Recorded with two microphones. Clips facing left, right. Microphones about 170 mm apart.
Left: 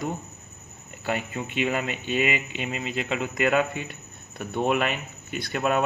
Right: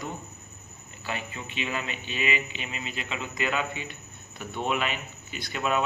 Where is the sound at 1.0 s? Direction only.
50° left (ahead or behind).